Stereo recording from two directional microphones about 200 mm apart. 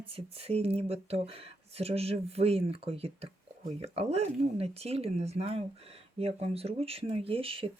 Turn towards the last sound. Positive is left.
turn(degrees=-25)  # may be behind; listen again after turning